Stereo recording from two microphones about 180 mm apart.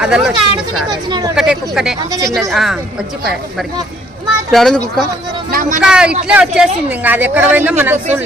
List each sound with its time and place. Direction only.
0.0 s speech: centre (ahead or behind)
0.9 s speech: 25° right (ahead or behind)
1.4 s speech: 5° right (ahead or behind)
4.5 s speech: centre (ahead or behind)
5.5 s speech: 50° right (ahead or behind)
5.9 s speech: 5° right (ahead or behind)